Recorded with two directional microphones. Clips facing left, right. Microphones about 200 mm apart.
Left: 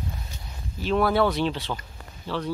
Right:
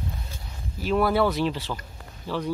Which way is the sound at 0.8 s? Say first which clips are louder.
Even; 10° right (ahead or behind).